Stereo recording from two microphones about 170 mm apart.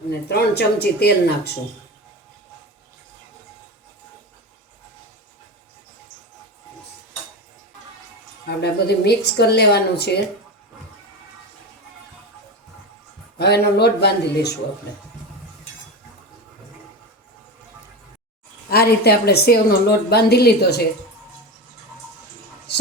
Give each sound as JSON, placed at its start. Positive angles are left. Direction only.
{"t": 0.3, "sound": "a woman's voice", "side_deg": 70}
{"t": 8.4, "sound": "a woman's voice", "side_deg": 70}
{"t": 13.4, "sound": "a woman's voice", "side_deg": 75}
{"t": 18.7, "sound": "a woman's voice", "side_deg": 70}